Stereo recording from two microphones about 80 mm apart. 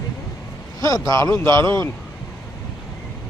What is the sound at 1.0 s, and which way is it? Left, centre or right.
Speech, left.